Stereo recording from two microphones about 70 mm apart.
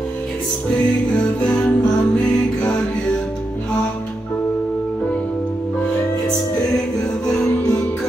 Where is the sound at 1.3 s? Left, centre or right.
Centre.